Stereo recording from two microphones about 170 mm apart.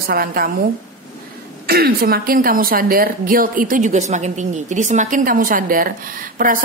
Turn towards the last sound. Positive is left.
turn(degrees=-55)  # may be behind; listen again after turning